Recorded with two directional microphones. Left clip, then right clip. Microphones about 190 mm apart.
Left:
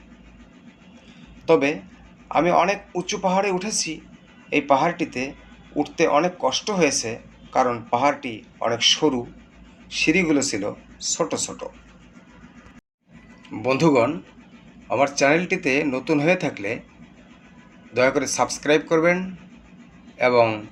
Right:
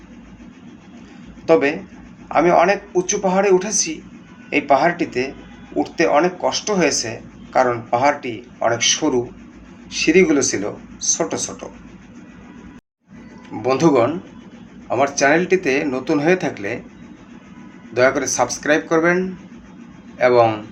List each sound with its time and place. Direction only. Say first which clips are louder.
1.5 s speech: right 3 dB; 40° left (ahead or behind)
13.6 s speech: right 3 dB; 35° left (ahead or behind)
17.9 s speech: right 4 dB; 35° left (ahead or behind)